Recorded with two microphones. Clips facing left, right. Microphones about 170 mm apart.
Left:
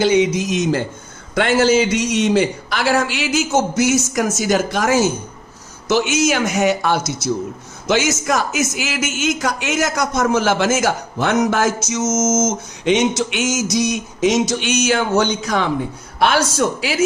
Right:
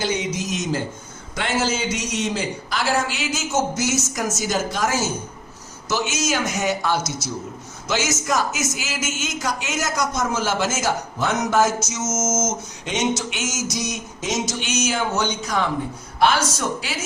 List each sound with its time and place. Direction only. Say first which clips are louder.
0.0 s a man's voice: left 9 dB; 70° left (ahead or behind)
12.0 s a sound: left 7 dB; 30° left (ahead or behind)
12.8 s a man's voice: left 7 dB; 70° left (ahead or behind)